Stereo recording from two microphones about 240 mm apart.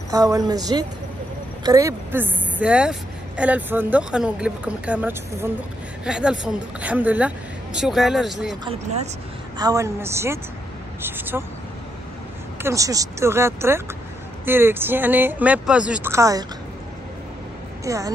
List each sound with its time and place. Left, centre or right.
0.1 s a woman's voice: centre
8.6 s speech: right
9.6 s speech: centre
12.6 s speech: centre
17.8 s speech: centre